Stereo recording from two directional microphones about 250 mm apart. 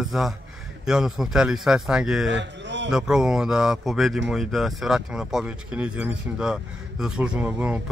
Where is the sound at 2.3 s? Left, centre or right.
Right.